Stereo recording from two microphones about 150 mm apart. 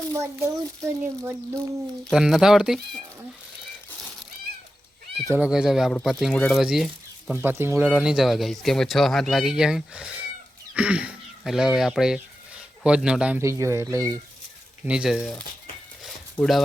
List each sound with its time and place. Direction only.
0.1 s a child's voice: 20° right (ahead or behind)
2.0 s speech: centre (ahead or behind)
5.3 s speech: 5° right (ahead or behind)
7.3 s speech: 15° right (ahead or behind)
7.9 s speech: 5° right (ahead or behind)
13.4 s speech: 20° right (ahead or behind)
14.8 s speech: 5° right (ahead or behind)
16.0 s a sound: centre (ahead or behind)